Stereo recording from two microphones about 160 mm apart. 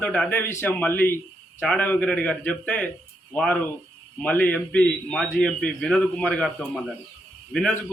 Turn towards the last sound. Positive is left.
turn(degrees=5)  # may be behind; listen again after turning